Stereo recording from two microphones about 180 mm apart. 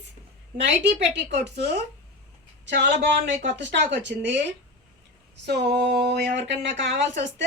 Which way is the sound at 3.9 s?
75° right (ahead or behind).